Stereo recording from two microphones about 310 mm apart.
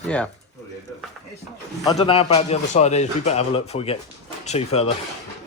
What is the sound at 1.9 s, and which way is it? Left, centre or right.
A man's voice, centre.